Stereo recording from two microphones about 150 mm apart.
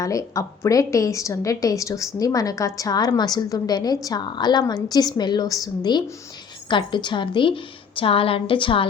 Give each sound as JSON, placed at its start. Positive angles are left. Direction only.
{"t": 0.0, "sound": "a woman's voice", "side_deg": 20}